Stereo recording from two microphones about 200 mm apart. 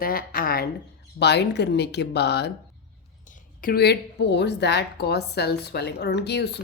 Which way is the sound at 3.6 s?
50° left (ahead or behind).